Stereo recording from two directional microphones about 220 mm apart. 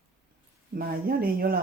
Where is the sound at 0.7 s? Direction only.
40° right (ahead or behind).